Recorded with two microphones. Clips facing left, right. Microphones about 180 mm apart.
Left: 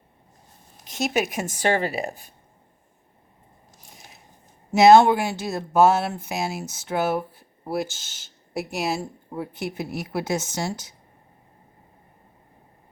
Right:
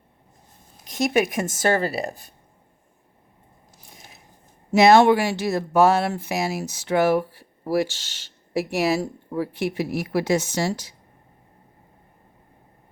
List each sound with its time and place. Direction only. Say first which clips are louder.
1.1 s a woman's voice: right 4 dB; 55° right (ahead or behind); by 2.2 s 35° right (ahead or behind)
4.8 s speech: even; 65° right (ahead or behind)